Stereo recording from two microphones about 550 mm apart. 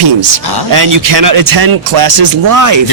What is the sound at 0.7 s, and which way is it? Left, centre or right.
Speech, right.